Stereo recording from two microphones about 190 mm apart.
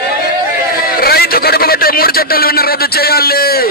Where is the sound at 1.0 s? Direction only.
55° left (ahead or behind).